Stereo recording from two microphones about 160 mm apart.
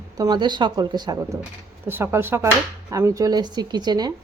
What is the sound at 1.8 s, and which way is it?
A woman's voice, 15° right (ahead or behind).